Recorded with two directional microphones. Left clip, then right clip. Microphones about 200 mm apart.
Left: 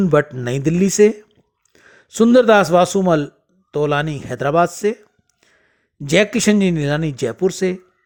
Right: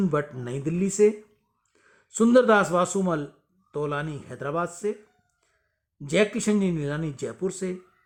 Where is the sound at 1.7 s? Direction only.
35° left (ahead or behind).